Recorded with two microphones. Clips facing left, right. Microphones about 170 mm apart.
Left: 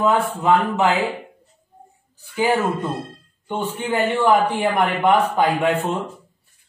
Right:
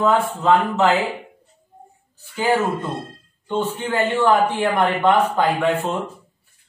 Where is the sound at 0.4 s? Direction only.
15° left (ahead or behind).